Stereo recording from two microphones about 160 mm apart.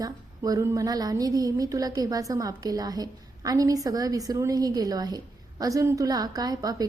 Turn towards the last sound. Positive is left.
turn(degrees=-25)  # may be behind; listen again after turning